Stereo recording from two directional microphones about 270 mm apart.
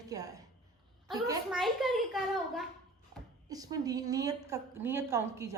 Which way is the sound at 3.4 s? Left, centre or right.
Centre.